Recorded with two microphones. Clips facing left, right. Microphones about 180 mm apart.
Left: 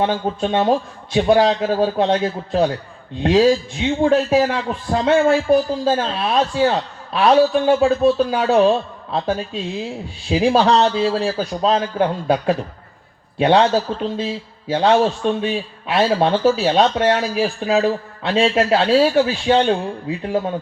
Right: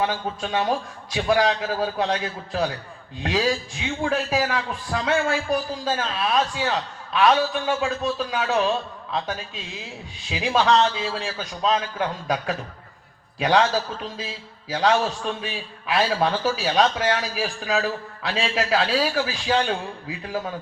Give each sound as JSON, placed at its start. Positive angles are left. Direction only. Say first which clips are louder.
{"t": 0.0, "sound": "a man's voice", "louder": "left 6 dB", "side_deg": 30}